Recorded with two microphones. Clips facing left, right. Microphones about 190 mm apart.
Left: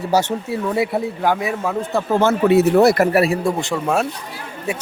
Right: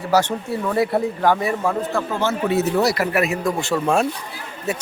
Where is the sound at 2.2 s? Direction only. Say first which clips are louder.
Left 7 dB; 60° left (ahead or behind); by 3.5 s 35° left (ahead or behind).